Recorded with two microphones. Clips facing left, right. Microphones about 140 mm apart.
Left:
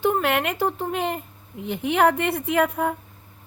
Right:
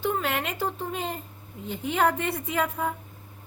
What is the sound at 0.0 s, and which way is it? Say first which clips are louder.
A woman's voice: left 6 dB; 60° left (ahead or behind).